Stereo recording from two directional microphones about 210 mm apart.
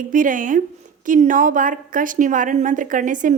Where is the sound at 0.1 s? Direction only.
40° right (ahead or behind).